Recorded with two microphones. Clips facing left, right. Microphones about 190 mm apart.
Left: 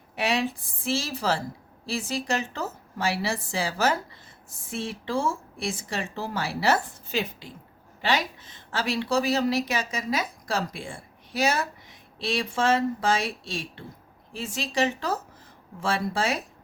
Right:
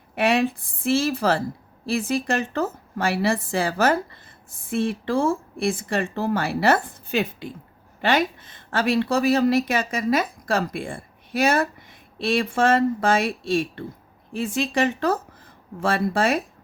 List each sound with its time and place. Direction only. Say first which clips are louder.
0.2 s a woman's voice: right 6 dB; 55° right (ahead or behind)